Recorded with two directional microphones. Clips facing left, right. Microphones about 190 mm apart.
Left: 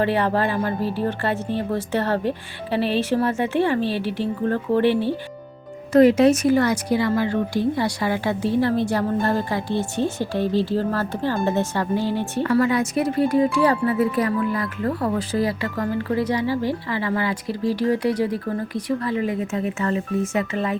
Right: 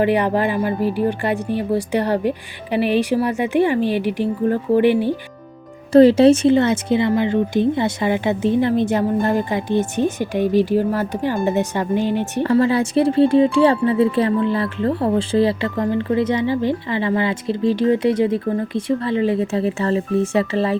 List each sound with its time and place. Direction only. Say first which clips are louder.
0.0 s a woman's voice: right 3 dB; 15° right (ahead or behind)
5.9 s speech: right 4 dB; 30° right (ahead or behind)
12.4 s speech: right 3 dB; 30° right (ahead or behind)